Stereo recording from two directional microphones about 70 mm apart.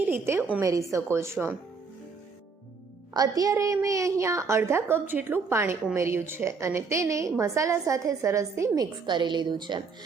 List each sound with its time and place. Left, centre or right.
0.0 s a woman's voice: right
0.6 s a woman's voice: right
3.1 s a woman's voice: right
8.8 s a woman's voice: right